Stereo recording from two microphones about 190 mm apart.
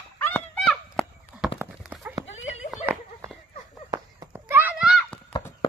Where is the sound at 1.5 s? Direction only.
10° right (ahead or behind).